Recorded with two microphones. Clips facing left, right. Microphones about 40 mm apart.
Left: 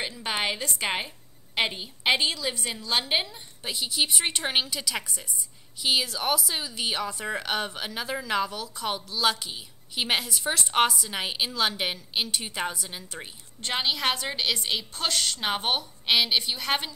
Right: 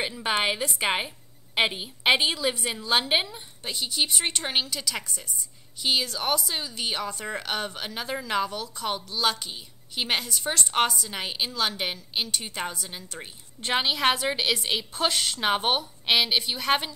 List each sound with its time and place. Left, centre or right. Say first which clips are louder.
0.0 s a woman's voice: right 3 dB; centre
3.6 s a woman's voice: even; centre
13.6 s a woman's voice: right 3 dB; centre